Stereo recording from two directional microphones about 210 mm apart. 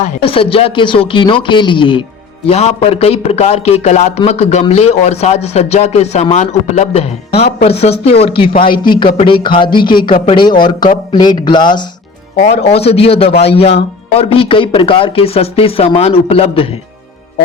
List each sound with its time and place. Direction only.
0.0 s a man's voice: 25° left (ahead or behind)
12.4 s a man's voice: 35° left (ahead or behind)